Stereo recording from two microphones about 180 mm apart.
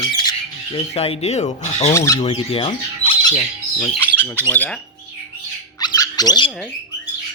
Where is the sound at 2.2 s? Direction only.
30° left (ahead or behind).